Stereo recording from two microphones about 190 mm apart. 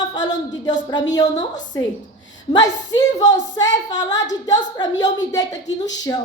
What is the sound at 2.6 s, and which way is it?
Speech, 20° left (ahead or behind).